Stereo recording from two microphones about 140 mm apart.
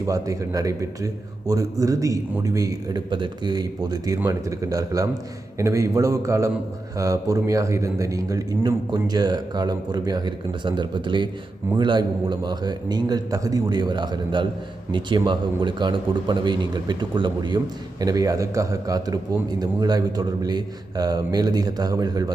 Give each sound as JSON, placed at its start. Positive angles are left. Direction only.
{"t": 0.0, "sound": "a man's voice", "side_deg": -25}